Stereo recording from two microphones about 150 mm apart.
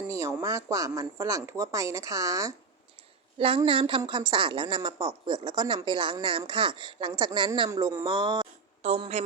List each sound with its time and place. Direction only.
0.1 s speech: 20° right (ahead or behind)
3.3 s a woman's voice: 35° right (ahead or behind)
7.7 s speech: 25° right (ahead or behind)
8.8 s speech: 45° right (ahead or behind)